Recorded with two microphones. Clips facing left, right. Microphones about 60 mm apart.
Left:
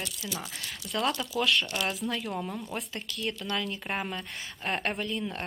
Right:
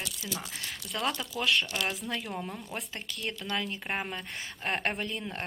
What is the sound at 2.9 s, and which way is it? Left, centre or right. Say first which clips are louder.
Speech: left 3 dB; right.